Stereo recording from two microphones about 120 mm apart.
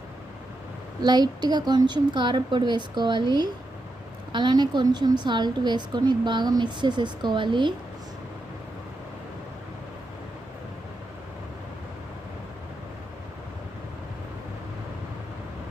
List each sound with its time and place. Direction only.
1.0 s a woman's voice: 35° right (ahead or behind)